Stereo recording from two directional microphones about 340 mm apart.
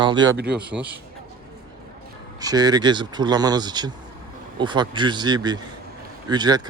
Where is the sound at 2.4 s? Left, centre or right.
Centre.